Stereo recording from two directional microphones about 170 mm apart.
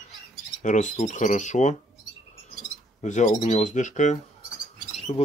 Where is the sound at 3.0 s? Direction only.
45° left (ahead or behind).